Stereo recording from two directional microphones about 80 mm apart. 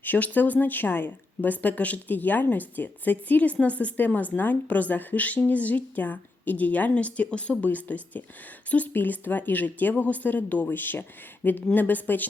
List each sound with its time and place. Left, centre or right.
0.0 s speech: left